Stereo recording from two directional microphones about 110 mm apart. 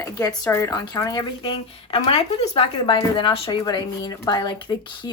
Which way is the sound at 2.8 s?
50° left (ahead or behind).